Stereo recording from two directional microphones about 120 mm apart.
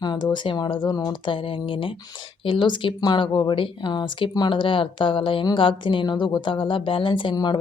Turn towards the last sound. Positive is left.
turn(degrees=40)  # may be behind; listen again after turning